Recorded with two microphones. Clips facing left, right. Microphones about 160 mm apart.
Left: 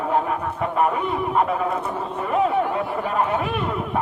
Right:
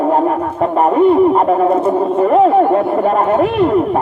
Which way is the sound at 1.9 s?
55° right (ahead or behind).